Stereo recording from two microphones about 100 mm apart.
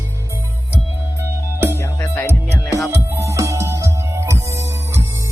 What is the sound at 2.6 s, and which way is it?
Music, 30° left (ahead or behind).